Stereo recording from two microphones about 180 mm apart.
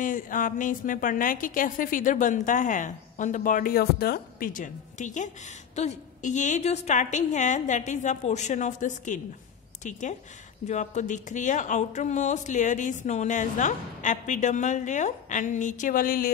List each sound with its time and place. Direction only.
0.0 s speech: 45° left (ahead or behind)